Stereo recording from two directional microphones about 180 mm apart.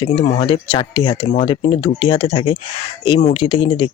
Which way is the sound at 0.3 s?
35° left (ahead or behind).